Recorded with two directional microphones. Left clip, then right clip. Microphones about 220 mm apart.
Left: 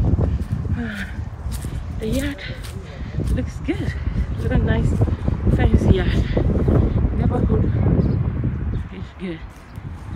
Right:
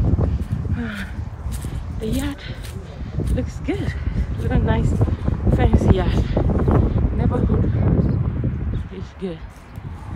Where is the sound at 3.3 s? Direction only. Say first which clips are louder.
Right 1 dB; 25° right (ahead or behind).